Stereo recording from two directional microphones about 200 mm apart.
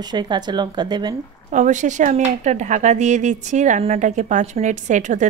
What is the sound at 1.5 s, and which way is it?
Speech, 35° right (ahead or behind).